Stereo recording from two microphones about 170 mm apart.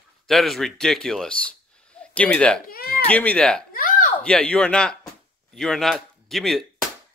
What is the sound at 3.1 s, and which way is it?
Speech, 10° left (ahead or behind).